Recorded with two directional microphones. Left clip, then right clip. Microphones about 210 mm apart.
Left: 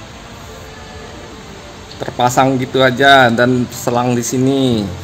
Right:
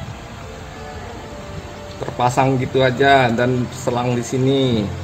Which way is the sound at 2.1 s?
50° left (ahead or behind).